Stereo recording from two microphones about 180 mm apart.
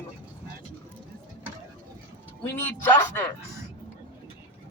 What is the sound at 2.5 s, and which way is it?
Speech, 10° left (ahead or behind).